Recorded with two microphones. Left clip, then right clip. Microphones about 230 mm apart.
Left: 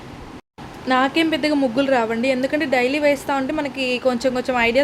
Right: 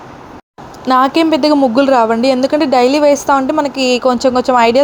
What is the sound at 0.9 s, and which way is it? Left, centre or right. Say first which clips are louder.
A woman's voice: right 8 dB; right.